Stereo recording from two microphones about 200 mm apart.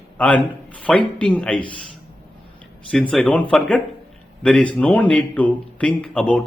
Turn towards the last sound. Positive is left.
turn(degrees=5)  # may be behind; listen again after turning